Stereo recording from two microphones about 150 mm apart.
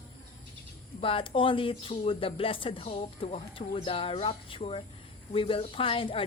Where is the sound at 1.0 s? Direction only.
35° left (ahead or behind).